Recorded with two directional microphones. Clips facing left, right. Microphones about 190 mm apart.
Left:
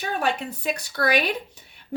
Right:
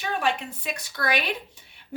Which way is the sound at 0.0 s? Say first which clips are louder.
Left 1 dB; 40° left (ahead or behind).